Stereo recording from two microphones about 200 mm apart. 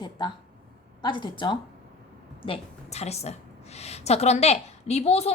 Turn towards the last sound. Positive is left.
turn(degrees=30)  # may be behind; listen again after turning